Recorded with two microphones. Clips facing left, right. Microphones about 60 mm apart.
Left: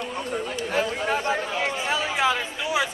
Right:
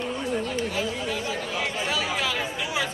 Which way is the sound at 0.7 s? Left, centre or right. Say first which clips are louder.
Left 4 dB; left.